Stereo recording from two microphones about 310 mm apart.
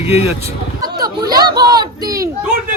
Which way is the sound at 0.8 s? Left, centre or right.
Right.